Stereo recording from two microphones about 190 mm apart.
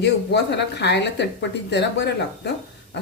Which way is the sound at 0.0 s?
65° left (ahead or behind).